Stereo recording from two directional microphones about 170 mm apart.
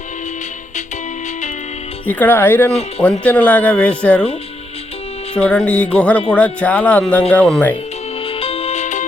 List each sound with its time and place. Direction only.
2.0 s speech: 10° left (ahead or behind)
5.4 s speech: 5° left (ahead or behind)
8.2 s music: 35° left (ahead or behind)